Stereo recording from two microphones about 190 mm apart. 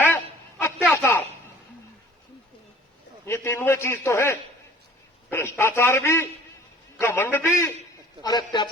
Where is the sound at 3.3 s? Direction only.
15° left (ahead or behind).